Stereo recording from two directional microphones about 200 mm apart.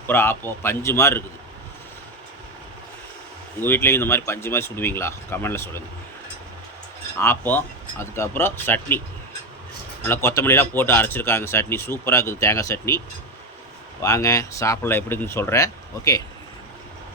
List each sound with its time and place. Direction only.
0.1 s speech: 10° left (ahead or behind)
3.6 s speech: 10° left (ahead or behind)
7.2 s speech: 10° left (ahead or behind)
10.1 s speech: 15° left (ahead or behind)
14.0 s speech: 15° left (ahead or behind)